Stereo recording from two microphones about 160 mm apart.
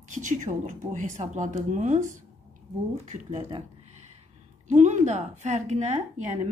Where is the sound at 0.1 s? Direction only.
50° right (ahead or behind).